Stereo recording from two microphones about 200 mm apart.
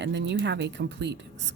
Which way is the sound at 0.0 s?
60° right (ahead or behind).